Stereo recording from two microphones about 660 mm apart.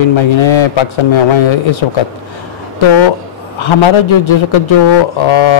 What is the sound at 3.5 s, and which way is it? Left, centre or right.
A man's voice, left.